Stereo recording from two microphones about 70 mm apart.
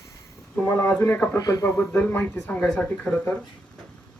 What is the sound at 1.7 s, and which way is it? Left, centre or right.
Speech, left.